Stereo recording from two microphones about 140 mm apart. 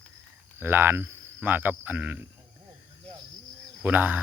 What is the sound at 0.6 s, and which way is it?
Speech, 15° right (ahead or behind).